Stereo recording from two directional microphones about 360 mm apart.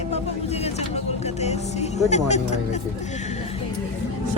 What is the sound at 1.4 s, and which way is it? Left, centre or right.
Music, centre.